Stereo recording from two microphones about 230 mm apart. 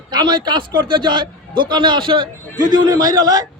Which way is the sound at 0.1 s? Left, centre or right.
Centre.